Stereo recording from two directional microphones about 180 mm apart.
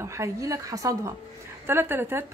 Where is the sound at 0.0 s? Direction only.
15° right (ahead or behind).